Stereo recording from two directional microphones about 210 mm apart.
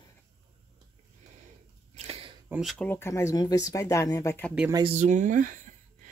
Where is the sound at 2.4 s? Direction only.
5° right (ahead or behind).